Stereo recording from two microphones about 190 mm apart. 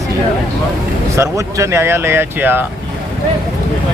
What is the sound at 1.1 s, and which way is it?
Speech, 15° right (ahead or behind).